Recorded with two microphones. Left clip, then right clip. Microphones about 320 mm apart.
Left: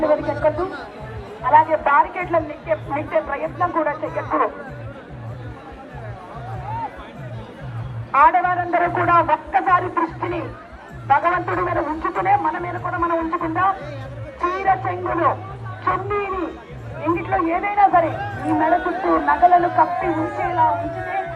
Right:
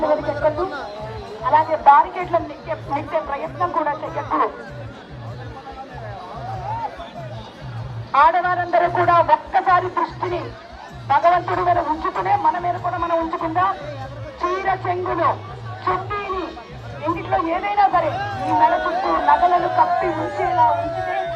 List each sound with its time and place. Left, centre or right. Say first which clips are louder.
0.1 s a man's voice: left 1 dB; centre
8.1 s a woman's voice: left 1 dB; centre